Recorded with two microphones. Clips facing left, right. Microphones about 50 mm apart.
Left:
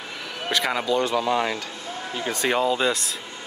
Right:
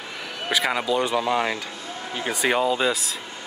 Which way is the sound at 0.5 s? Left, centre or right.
Centre.